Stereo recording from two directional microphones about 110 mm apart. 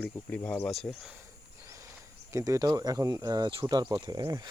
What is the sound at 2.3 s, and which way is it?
Speech, 30° right (ahead or behind).